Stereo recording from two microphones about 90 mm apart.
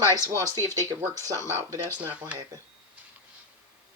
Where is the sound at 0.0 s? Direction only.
40° right (ahead or behind).